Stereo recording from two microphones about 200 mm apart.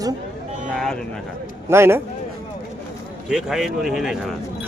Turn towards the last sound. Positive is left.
turn(degrees=0)  # may be behind; listen again after turning